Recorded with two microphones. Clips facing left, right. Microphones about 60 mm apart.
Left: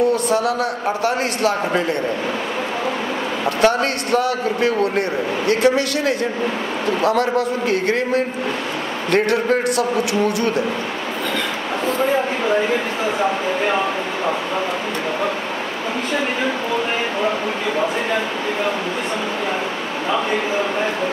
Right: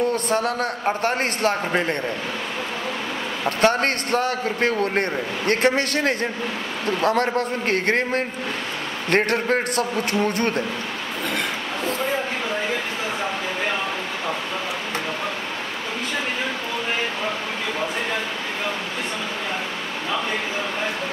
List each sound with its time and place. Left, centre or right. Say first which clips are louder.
0.1 s a man's voice: left 4 dB; right
3.4 s a man's voice: left 2 dB; right
13.2 s speech: left 8 dB; centre